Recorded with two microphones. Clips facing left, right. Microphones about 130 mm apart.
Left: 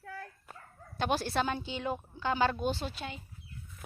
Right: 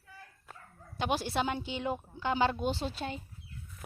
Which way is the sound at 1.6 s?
25° right (ahead or behind).